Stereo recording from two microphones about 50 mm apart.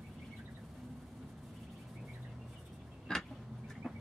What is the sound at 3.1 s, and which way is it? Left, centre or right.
Vehicle, centre.